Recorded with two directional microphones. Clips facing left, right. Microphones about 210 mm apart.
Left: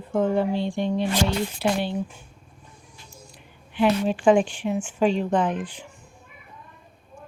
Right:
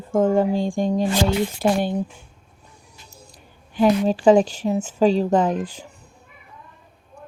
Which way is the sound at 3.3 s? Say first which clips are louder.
Right 3 dB; 40° right (ahead or behind).